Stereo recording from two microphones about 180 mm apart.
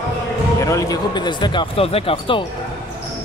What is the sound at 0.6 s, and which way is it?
Speech, 20° left (ahead or behind).